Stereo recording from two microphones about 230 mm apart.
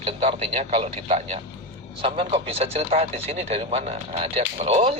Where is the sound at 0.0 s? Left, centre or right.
Right.